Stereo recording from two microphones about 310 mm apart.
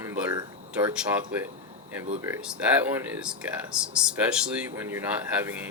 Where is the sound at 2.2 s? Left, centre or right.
Centre.